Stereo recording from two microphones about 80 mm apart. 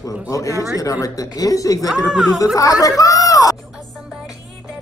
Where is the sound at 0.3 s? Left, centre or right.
Left.